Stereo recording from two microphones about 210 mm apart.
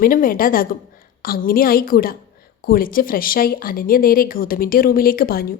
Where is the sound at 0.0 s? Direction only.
40° left (ahead or behind).